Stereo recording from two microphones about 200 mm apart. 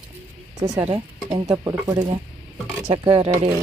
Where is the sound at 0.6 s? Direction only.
15° right (ahead or behind).